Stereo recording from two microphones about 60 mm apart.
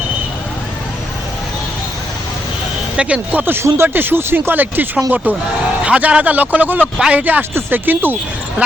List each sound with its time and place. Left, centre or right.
3.0 s a man's voice: right
3.4 s a man's voice: right